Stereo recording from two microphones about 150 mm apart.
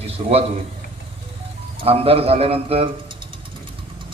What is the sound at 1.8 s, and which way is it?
A man's voice, 40° right (ahead or behind).